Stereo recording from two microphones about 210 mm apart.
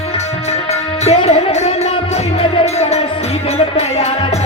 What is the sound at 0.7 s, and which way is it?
Music, 30° left (ahead or behind).